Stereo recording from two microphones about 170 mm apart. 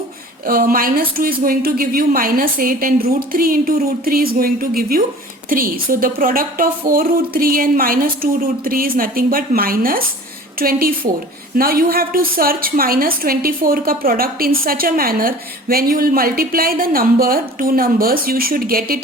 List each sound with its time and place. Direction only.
0.4 s a woman's voice: 60° right (ahead or behind)